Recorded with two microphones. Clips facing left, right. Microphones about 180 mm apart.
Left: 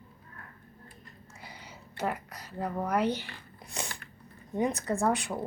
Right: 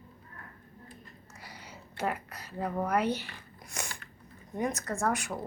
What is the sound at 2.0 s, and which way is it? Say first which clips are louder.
Speech: even; 5° right (ahead or behind).